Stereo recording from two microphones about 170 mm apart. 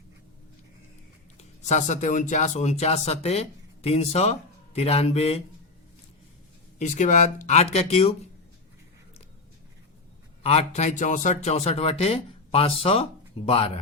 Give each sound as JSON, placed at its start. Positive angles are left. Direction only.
{"t": 1.4, "sound": "speech", "side_deg": 45}
{"t": 6.7, "sound": "speech", "side_deg": 45}
{"t": 10.4, "sound": "speech", "side_deg": 40}